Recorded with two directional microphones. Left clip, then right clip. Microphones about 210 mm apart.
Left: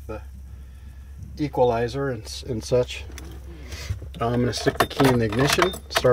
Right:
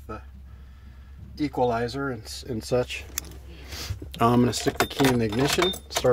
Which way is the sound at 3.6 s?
35° right (ahead or behind).